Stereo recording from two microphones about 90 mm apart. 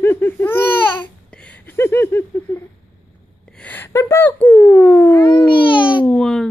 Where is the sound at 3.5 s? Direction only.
20° left (ahead or behind).